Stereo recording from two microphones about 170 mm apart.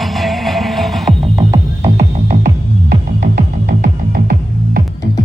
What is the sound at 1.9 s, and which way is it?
Music, 55° right (ahead or behind).